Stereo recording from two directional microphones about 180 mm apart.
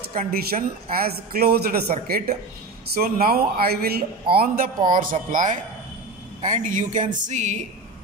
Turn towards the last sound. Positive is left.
turn(degrees=-40)  # may be behind; listen again after turning